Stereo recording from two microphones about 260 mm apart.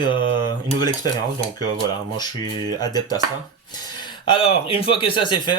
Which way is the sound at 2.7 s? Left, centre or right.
Centre.